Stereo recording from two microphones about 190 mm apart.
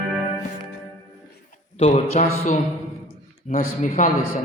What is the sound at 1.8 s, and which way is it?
Speech, 35° left (ahead or behind).